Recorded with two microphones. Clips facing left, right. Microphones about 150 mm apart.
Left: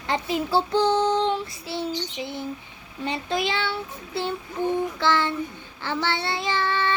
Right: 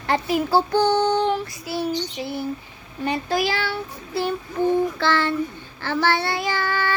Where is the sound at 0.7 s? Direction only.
65° right (ahead or behind).